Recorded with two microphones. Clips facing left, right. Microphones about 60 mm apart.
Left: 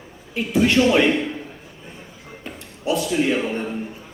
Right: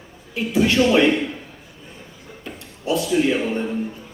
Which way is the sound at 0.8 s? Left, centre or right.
Centre.